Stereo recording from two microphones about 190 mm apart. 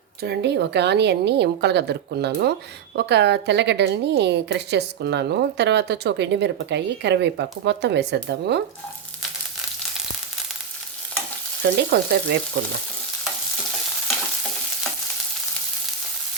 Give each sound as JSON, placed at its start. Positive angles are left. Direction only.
{"t": 0.2, "sound": "a woman's voice", "side_deg": -60}
{"t": 11.8, "sound": "a woman's voice", "side_deg": -60}